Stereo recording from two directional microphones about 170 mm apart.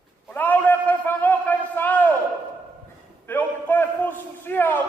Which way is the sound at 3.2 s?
10° left (ahead or behind).